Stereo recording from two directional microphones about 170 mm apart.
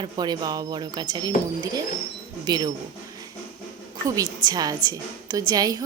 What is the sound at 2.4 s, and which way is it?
Speech, 25° right (ahead or behind).